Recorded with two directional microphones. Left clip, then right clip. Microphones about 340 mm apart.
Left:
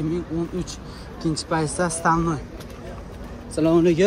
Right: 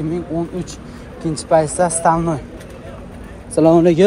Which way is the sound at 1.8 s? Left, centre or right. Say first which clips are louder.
Right 6 dB; centre.